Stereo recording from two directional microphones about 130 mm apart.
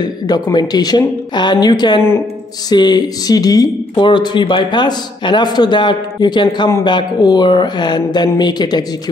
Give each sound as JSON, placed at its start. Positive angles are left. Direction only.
{"t": 0.0, "sound": "speech", "side_deg": 30}